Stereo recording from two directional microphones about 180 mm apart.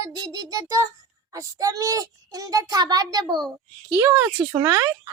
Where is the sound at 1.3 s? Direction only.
20° right (ahead or behind).